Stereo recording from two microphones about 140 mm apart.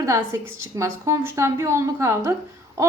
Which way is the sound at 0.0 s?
20° right (ahead or behind).